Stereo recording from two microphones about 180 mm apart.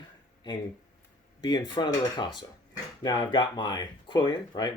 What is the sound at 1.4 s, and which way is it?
Speech, 25° left (ahead or behind).